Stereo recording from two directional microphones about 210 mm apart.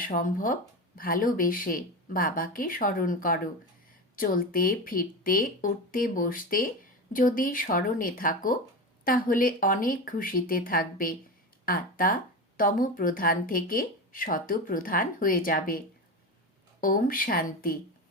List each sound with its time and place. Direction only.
0.0 s a woman's voice: 40° left (ahead or behind)
16.8 s a woman's voice: 40° left (ahead or behind)